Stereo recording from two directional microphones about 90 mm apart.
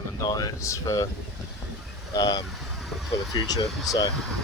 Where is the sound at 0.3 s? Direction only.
45° left (ahead or behind).